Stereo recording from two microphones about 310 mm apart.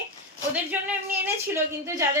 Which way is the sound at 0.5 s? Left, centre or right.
Centre.